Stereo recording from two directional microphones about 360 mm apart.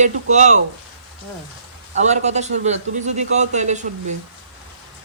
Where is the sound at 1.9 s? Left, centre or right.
Centre.